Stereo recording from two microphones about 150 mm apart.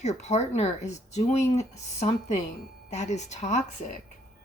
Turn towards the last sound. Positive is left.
turn(degrees=50)  # may be behind; listen again after turning